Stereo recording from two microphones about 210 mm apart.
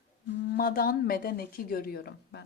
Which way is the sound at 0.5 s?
45° left (ahead or behind).